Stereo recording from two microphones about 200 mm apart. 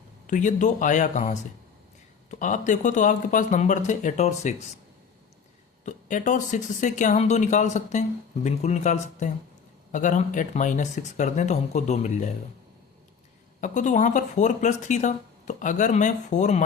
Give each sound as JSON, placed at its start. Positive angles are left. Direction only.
{"t": 0.3, "sound": "speech", "side_deg": 40}
{"t": 5.8, "sound": "speech", "side_deg": 40}
{"t": 13.6, "sound": "speech", "side_deg": 40}